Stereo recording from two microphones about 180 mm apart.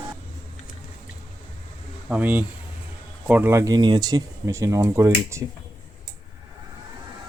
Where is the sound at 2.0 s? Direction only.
10° right (ahead or behind).